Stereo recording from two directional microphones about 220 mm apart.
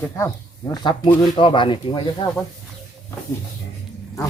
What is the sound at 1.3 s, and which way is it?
Speech, 20° left (ahead or behind).